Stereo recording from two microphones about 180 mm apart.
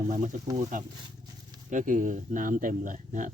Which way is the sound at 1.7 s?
45° right (ahead or behind).